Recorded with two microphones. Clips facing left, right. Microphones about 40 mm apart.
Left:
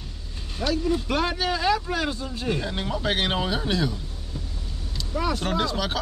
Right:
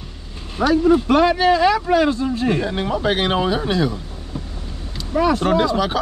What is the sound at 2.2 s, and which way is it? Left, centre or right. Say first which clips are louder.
Speech: right 9 dB; right.